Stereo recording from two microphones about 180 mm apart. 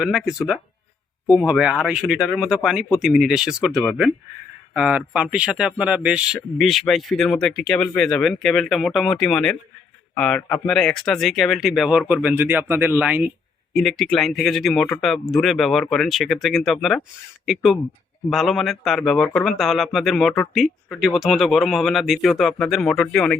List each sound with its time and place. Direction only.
0.0 s speech: 5° right (ahead or behind)